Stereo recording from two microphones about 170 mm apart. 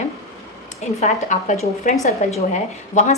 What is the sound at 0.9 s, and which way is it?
A woman's voice, 45° left (ahead or behind).